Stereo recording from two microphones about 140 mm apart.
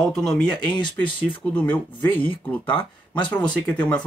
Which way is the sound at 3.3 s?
10° left (ahead or behind).